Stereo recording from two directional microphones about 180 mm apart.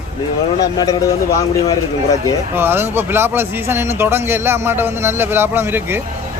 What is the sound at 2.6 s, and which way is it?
A man's voice, 10° right (ahead or behind).